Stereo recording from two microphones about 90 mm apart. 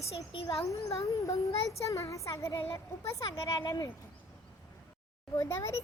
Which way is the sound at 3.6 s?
50° left (ahead or behind).